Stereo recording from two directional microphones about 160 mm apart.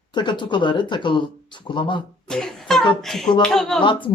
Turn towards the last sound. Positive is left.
turn(degrees=30)  # may be behind; listen again after turning